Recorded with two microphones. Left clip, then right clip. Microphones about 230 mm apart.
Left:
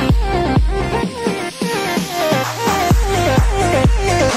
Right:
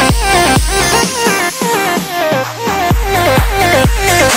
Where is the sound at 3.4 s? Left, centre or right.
Right.